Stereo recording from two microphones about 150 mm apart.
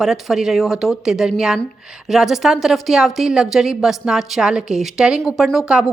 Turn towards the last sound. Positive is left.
turn(degrees=-5)  # may be behind; listen again after turning